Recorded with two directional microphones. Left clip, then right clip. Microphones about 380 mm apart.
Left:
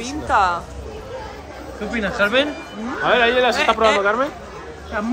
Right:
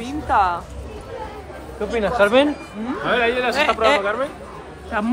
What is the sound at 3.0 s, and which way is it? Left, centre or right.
Speech, centre.